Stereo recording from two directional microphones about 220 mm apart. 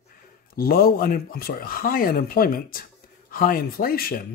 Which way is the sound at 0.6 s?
45° left (ahead or behind).